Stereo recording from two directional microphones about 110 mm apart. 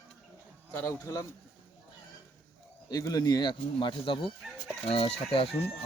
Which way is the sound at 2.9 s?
35° left (ahead or behind).